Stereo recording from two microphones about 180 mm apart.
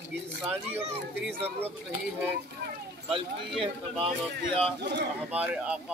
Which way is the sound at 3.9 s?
30° right (ahead or behind).